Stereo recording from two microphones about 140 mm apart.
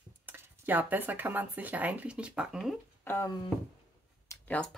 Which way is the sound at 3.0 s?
15° left (ahead or behind).